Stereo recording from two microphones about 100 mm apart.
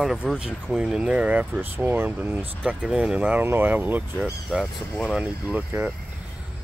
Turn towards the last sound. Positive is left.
turn(degrees=-15)  # may be behind; listen again after turning